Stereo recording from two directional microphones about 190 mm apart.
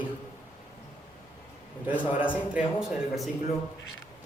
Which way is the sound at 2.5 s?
5° right (ahead or behind).